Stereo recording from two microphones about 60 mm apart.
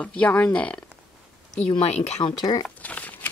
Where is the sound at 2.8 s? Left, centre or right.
Left.